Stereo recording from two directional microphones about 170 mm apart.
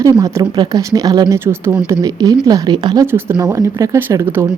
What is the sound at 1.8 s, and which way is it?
A woman's voice, 20° right (ahead or behind).